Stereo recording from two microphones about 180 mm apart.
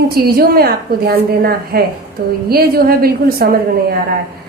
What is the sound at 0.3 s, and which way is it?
A woman's voice, 55° right (ahead or behind).